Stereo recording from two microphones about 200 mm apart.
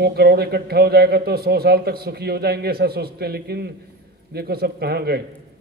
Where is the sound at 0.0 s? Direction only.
55° right (ahead or behind).